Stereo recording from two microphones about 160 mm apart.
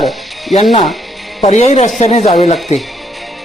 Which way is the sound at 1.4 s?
45° left (ahead or behind).